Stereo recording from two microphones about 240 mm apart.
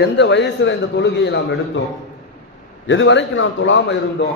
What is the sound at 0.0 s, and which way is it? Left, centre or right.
A man's voice, left.